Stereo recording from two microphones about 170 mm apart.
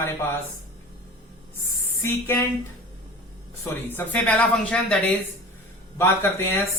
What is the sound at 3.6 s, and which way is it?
Speech, 10° left (ahead or behind).